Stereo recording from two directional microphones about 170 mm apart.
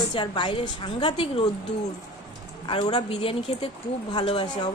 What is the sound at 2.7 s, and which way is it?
A woman's voice, 30° left (ahead or behind).